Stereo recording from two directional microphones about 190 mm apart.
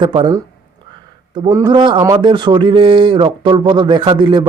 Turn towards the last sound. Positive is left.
turn(degrees=-25)  # may be behind; listen again after turning